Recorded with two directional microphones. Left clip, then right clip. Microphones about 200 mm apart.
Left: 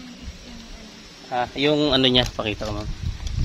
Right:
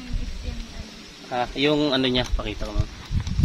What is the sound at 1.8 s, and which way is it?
Speech, 45° left (ahead or behind).